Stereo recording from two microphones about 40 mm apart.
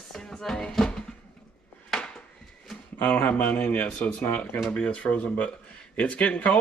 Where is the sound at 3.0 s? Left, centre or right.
Left.